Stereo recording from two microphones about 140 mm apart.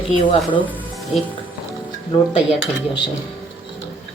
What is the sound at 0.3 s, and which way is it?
Speech, 35° left (ahead or behind).